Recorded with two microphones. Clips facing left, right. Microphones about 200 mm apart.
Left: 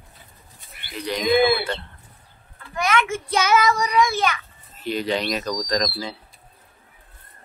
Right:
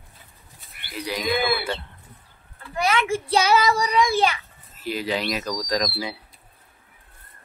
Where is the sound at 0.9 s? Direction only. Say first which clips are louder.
Left 2 dB; 5° right (ahead or behind).